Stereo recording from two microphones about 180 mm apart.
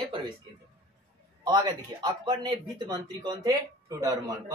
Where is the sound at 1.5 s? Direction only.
20° right (ahead or behind).